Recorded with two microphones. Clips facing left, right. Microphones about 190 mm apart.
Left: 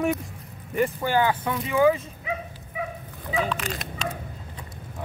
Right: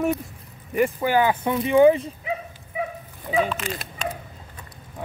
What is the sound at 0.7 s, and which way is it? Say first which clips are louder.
Speech: right 3 dB; 15° right (ahead or behind).